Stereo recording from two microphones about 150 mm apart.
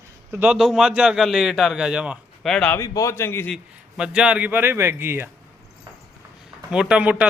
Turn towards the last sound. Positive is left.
turn(degrees=-10)  # may be behind; listen again after turning